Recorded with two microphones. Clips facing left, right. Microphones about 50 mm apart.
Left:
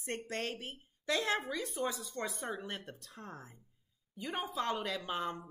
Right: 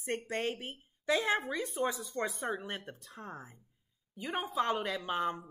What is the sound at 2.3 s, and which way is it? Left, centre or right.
A woman's voice, centre.